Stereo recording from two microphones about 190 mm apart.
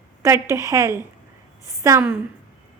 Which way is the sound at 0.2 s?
15° right (ahead or behind).